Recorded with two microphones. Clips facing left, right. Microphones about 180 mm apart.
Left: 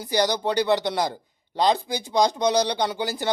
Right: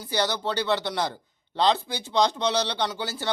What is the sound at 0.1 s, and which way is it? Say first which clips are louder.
Speech: left 4 dB; 15° left (ahead or behind).